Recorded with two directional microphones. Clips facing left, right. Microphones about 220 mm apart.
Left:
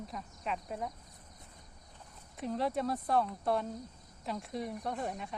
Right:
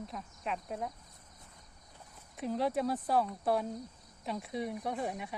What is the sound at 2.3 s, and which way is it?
Speech, centre (ahead or behind).